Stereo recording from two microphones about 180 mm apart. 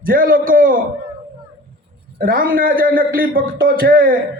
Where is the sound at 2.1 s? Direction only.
50° right (ahead or behind).